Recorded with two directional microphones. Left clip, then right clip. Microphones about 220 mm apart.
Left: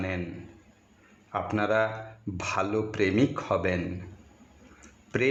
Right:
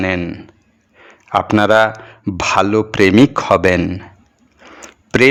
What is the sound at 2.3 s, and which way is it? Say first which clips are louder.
Speech: right 15 dB; 40° right (ahead or behind).